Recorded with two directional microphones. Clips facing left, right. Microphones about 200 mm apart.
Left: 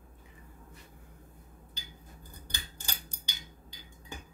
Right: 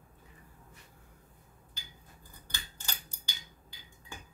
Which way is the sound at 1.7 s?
20° left (ahead or behind).